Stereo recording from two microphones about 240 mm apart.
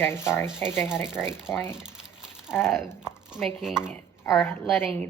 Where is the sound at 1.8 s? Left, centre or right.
Centre.